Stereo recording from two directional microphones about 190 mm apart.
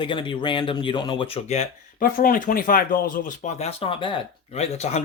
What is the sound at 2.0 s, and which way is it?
Speech, 50° left (ahead or behind).